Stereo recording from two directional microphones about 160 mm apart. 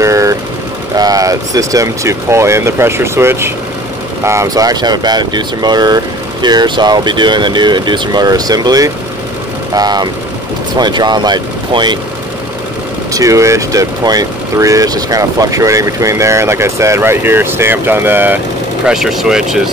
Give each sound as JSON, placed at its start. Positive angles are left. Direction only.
{"t": 0.0, "sound": "vehicle", "side_deg": -20}
{"t": 0.9, "sound": "speech", "side_deg": -25}
{"t": 13.1, "sound": "speech", "side_deg": -20}